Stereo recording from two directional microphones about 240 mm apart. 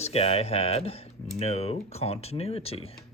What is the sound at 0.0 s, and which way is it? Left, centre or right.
Speech, left.